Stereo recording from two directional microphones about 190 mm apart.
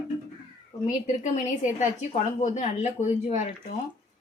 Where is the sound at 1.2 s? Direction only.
40° left (ahead or behind).